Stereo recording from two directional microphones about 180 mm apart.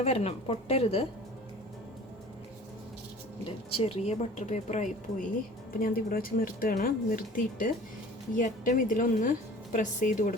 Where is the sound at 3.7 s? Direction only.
35° left (ahead or behind).